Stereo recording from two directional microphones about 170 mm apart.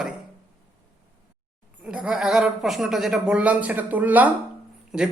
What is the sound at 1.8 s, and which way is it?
Speech, 5° right (ahead or behind).